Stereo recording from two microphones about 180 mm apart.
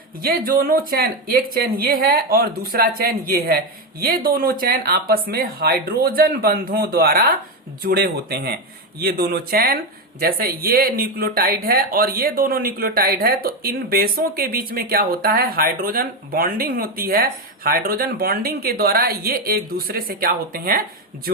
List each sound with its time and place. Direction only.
0.2 s speech: 55° right (ahead or behind)